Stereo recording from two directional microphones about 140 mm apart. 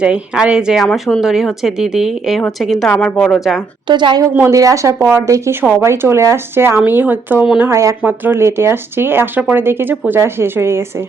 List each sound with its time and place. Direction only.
0.0 s speech: 5° right (ahead or behind)
3.8 s a woman's voice: 35° right (ahead or behind); by 10.8 s 20° right (ahead or behind)